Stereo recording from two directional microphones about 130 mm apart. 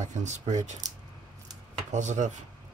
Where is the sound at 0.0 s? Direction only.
65° right (ahead or behind).